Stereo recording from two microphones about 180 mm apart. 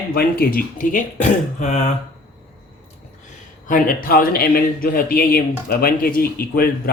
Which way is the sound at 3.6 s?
50° left (ahead or behind).